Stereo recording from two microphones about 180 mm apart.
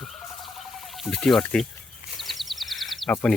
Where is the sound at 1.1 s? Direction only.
5° left (ahead or behind).